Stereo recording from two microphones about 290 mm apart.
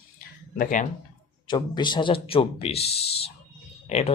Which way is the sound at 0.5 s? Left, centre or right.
Left.